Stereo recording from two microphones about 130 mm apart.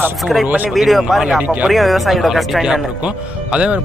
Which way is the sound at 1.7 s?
Centre (ahead or behind).